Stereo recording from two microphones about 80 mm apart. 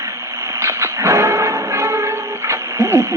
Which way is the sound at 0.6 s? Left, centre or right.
Right.